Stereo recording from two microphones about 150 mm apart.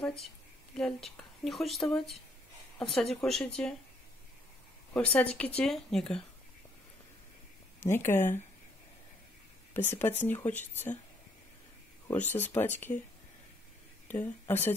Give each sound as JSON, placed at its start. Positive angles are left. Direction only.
{"t": 0.0, "sound": "a sound", "side_deg": 5}
{"t": 0.7, "sound": "a woman's voice", "side_deg": 5}
{"t": 4.9, "sound": "a woman's voice", "side_deg": 10}
{"t": 7.8, "sound": "speech", "side_deg": 15}
{"t": 9.8, "sound": "speech", "side_deg": 15}
{"t": 12.3, "sound": "speech", "side_deg": 15}
{"t": 14.0, "sound": "speech", "side_deg": 10}